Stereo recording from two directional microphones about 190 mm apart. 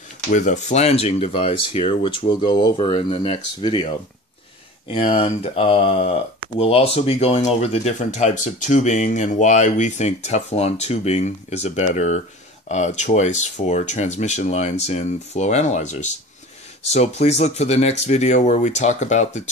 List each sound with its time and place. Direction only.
0.3 s speech: 40° left (ahead or behind)